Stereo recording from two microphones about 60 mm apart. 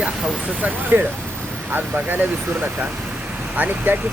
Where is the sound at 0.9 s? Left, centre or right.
Right.